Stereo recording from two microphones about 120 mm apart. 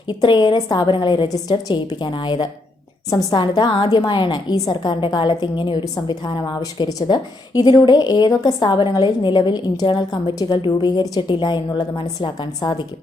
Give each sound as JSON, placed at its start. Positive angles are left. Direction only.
{"t": 0.1, "sound": "a woman's voice", "side_deg": 40}